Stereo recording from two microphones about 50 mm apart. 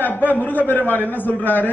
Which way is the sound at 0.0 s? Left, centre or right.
Left.